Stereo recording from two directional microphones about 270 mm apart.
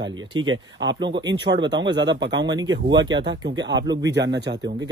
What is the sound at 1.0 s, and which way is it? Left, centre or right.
Speech, centre.